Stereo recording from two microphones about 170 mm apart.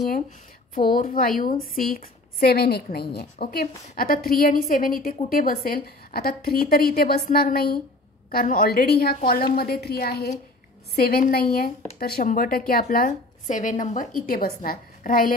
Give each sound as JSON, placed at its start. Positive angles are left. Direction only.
{"t": 0.7, "sound": "a woman's voice", "side_deg": 55}